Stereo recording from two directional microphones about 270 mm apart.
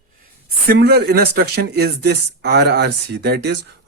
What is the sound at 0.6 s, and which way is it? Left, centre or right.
Speech, right.